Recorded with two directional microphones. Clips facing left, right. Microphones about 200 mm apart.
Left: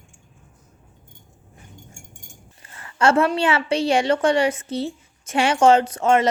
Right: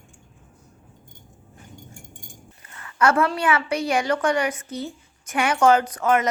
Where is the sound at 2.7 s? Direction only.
30° left (ahead or behind).